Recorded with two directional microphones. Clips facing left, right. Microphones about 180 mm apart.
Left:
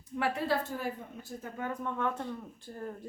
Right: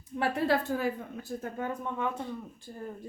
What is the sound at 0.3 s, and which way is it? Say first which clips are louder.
Speech: right 4 dB; 90° right.